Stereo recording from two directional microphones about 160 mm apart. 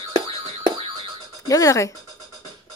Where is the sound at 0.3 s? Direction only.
35° right (ahead or behind).